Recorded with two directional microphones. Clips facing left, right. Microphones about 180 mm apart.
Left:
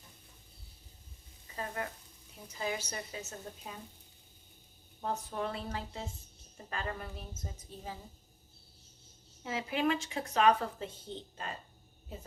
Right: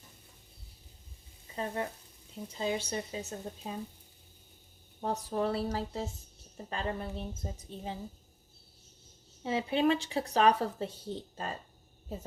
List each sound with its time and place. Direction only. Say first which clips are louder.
1.5 s speech: right 4 dB; 25° right (ahead or behind)
4.9 s speech: right 4 dB; 35° right (ahead or behind)
9.4 s speech: right 4 dB; 30° right (ahead or behind)